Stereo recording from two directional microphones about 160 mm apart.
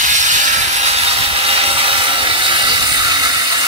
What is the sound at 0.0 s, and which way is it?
Sawing, 50° right (ahead or behind).